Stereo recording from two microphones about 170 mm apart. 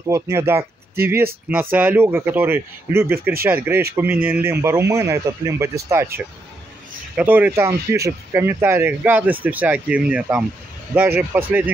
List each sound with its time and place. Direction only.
0.1 s speech: 15° right (ahead or behind)
7.2 s speech: 10° right (ahead or behind)